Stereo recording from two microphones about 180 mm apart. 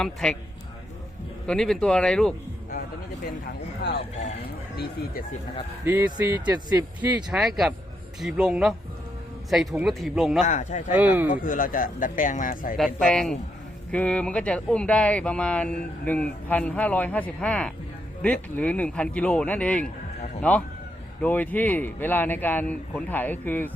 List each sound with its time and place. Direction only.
0.0 s speech: 5° left (ahead or behind)
1.5 s speech: 5° left (ahead or behind)
5.8 s speech: 15° right (ahead or behind)
10.4 s speech: 40° left (ahead or behind)
10.9 s speech: 10° right (ahead or behind)
11.3 s speech: 50° left (ahead or behind)
12.7 s speech: centre (ahead or behind)
21.2 s speech: 10° left (ahead or behind)